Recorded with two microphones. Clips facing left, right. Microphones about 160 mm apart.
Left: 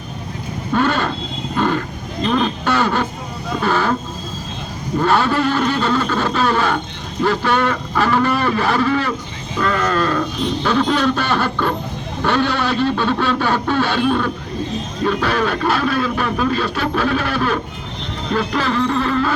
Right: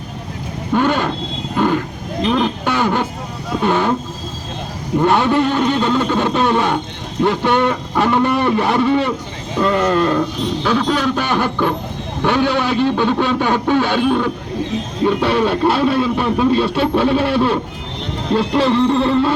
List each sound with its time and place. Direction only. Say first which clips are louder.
0.7 s a sound: right 2 dB; 15° right (ahead or behind)
1.5 s vehicle: right 2 dB; 10° right (ahead or behind)
2.2 s speech: right 1 dB; 10° right (ahead or behind)
4.9 s a man's voice: right 3 dB; 20° right (ahead or behind)